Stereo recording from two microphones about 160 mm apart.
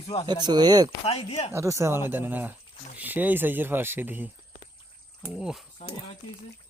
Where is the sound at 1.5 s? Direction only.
20° right (ahead or behind); by 5.6 s centre (ahead or behind).